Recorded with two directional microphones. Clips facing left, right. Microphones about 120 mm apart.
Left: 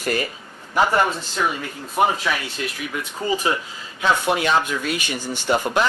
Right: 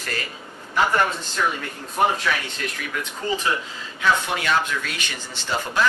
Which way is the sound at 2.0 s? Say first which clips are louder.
Left 1 dB; 10° left (ahead or behind).